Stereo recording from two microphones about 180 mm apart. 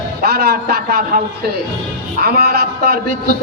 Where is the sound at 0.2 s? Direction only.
55° right (ahead or behind).